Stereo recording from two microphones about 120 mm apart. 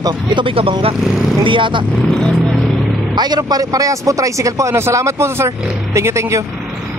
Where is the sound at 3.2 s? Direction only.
35° right (ahead or behind).